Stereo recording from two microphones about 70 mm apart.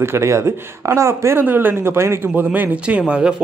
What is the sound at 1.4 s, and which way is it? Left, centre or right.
Speech, right.